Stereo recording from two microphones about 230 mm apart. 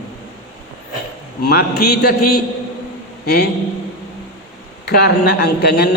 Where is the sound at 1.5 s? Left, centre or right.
Left.